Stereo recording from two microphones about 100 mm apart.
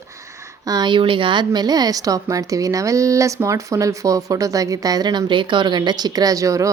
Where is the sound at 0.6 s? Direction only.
45° right (ahead or behind).